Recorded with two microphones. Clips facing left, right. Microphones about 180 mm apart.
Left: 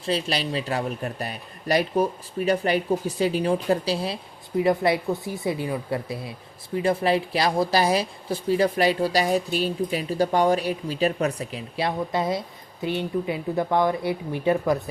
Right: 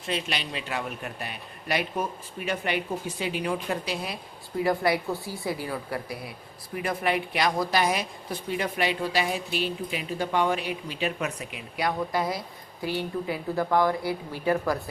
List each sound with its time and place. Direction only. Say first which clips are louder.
0.0 s a man's voice: left 5 dB; 35° left (ahead or behind)